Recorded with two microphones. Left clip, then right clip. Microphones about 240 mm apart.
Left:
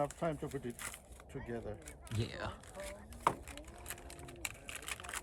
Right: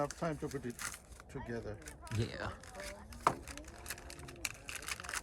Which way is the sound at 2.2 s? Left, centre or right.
Centre.